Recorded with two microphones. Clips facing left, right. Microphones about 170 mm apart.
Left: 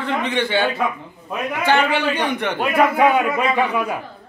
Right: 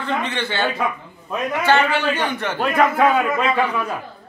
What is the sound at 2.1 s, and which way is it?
A man's voice, 10° left (ahead or behind).